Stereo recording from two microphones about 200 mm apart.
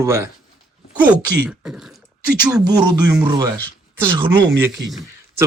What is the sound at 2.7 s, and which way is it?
Speech, 20° right (ahead or behind).